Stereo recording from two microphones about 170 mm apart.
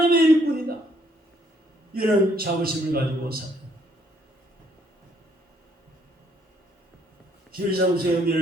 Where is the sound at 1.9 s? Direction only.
60° right (ahead or behind).